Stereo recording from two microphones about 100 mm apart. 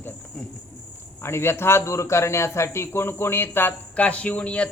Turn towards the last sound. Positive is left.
turn(degrees=15)  # may be behind; listen again after turning